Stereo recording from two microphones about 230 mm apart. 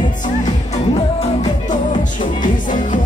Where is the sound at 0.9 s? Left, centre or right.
Left.